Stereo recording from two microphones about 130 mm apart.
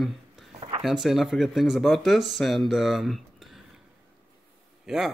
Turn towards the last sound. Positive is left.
turn(degrees=-5)  # may be behind; listen again after turning